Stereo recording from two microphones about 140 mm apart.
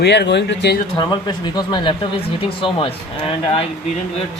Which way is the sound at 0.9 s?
30° left (ahead or behind).